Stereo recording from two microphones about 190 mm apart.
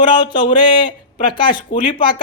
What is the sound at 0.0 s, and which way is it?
Speech, 25° left (ahead or behind).